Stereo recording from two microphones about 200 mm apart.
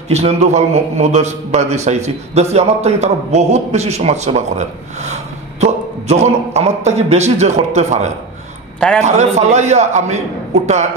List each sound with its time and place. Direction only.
0.1 s a man's voice: 35° right (ahead or behind)
8.7 s a man's voice: 5° left (ahead or behind)
9.0 s a man's voice: 35° right (ahead or behind)